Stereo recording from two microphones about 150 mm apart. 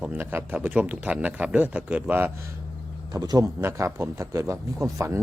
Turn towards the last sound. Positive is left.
turn(degrees=-20)  # may be behind; listen again after turning